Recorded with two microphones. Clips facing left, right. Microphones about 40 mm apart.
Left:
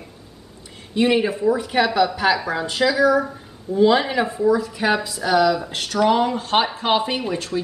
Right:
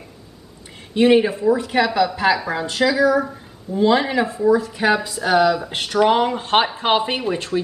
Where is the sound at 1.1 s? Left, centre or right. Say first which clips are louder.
Right 3 dB; centre.